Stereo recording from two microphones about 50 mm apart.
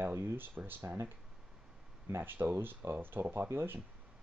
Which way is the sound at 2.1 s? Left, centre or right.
Right.